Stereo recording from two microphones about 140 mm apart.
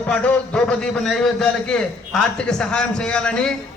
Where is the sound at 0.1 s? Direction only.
10° left (ahead or behind).